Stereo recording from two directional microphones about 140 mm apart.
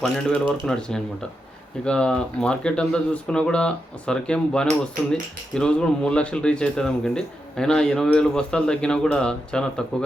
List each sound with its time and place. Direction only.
0.0 s speech: 5° left (ahead or behind)